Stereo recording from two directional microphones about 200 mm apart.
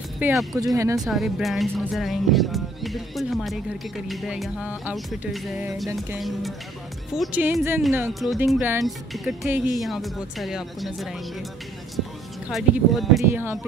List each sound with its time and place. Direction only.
0.2 s speech: centre (ahead or behind)
0.6 s speech: 15° right (ahead or behind)
0.9 s speech: centre (ahead or behind)
8.1 s speech: centre (ahead or behind)
12.4 s speech: centre (ahead or behind)
13.3 s speech: 10° right (ahead or behind)